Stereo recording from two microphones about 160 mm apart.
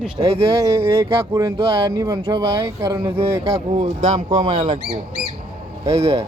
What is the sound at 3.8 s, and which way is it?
Speech, 45° right (ahead or behind).